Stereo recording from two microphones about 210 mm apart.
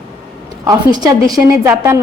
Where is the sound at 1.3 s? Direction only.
15° right (ahead or behind).